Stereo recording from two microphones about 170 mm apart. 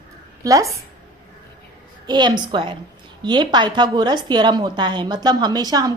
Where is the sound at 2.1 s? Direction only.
25° right (ahead or behind).